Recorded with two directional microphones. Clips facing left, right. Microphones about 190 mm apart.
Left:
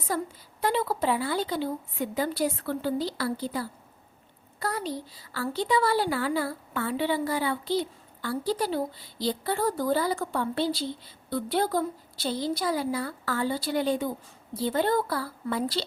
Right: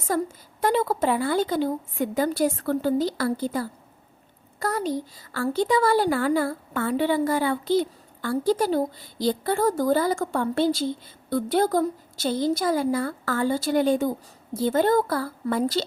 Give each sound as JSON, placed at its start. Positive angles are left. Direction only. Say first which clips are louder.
{"t": 0.0, "sound": "a woman's voice", "louder": "right 5 dB", "side_deg": -45}